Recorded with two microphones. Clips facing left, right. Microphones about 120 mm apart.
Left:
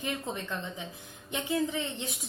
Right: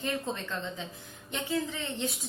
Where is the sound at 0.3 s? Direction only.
15° left (ahead or behind).